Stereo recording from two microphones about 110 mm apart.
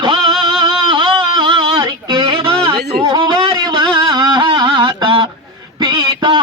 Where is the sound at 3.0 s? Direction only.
40° right (ahead or behind).